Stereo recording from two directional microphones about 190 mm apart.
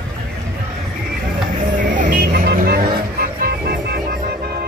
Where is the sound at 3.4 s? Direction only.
55° right (ahead or behind).